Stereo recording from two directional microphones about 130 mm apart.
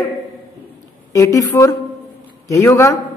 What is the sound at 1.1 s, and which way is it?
A man's voice, 25° left (ahead or behind).